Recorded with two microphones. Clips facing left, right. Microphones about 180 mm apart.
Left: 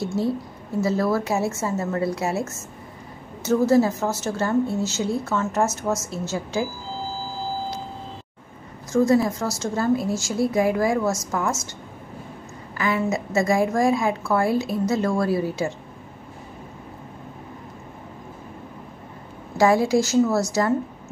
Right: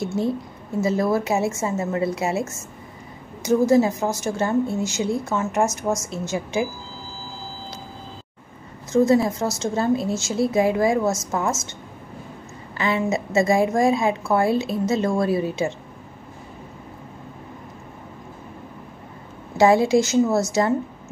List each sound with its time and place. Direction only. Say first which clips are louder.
0.0 s a woman's voice: even; 20° right (ahead or behind)
3.4 s a woman's voice: right 1 dB; 15° right (ahead or behind)
8.9 s a woman's voice: right 1 dB; 20° right (ahead or behind)
12.7 s a woman's voice: right 1 dB; 25° right (ahead or behind)
19.5 s a woman's voice: right 2 dB; 25° right (ahead or behind)